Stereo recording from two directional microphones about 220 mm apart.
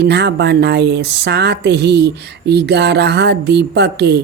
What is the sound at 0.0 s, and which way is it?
Speech, 50° right (ahead or behind).